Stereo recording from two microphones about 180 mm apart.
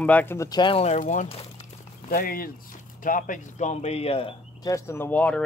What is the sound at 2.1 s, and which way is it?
Speech, 55° left (ahead or behind).